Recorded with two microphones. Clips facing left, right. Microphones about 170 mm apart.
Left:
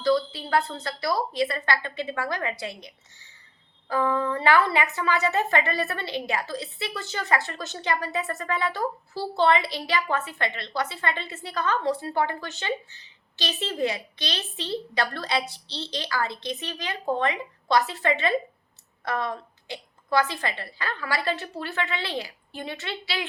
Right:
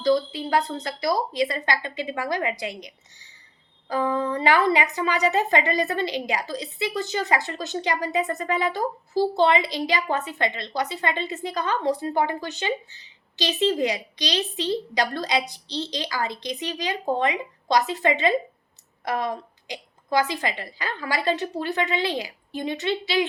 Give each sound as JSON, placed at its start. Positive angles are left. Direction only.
{"t": 0.0, "sound": "a woman's voice", "side_deg": -15}